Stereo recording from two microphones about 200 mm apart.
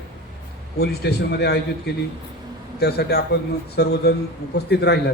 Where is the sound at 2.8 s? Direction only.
55° left (ahead or behind).